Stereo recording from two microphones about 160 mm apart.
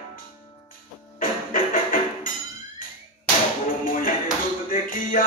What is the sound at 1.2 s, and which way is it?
Music, 60° left (ahead or behind).